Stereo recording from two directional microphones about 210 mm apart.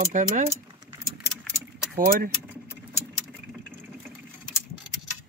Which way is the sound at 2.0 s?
45° right (ahead or behind).